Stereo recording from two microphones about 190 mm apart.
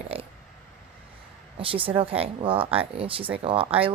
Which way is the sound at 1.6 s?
30° right (ahead or behind).